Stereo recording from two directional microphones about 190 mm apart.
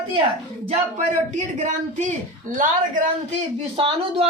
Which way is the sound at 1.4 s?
40° right (ahead or behind).